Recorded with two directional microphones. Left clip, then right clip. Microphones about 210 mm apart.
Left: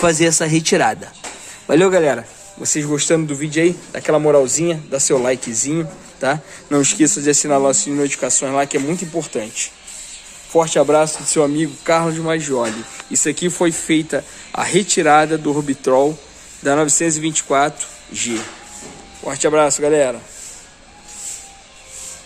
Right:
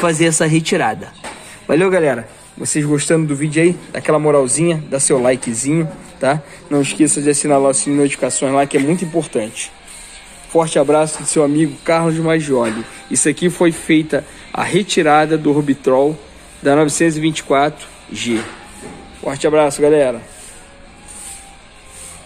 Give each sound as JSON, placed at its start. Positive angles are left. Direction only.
{"t": 0.0, "sound": "a man's voice", "side_deg": 0}
{"t": 6.7, "sound": "speech", "side_deg": 25}
{"t": 7.4, "sound": "a man's voice", "side_deg": 5}